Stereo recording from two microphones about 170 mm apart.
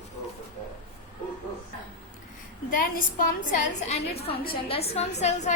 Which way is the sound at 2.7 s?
55° left (ahead or behind).